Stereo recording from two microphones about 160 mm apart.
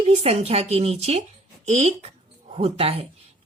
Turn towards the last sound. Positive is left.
turn(degrees=-40)  # may be behind; listen again after turning